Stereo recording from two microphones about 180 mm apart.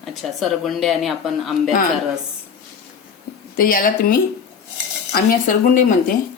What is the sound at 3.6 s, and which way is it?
Speech, 55° left (ahead or behind).